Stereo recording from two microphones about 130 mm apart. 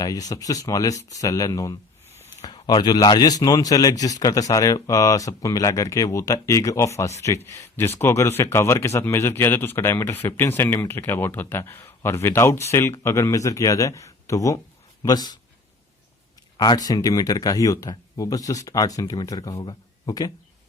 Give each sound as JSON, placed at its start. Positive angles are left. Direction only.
{"t": 0.0, "sound": "speech", "side_deg": 30}
{"t": 16.6, "sound": "speech", "side_deg": 30}